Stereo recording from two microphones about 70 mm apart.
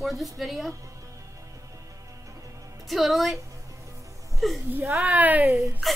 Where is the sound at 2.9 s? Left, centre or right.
Centre.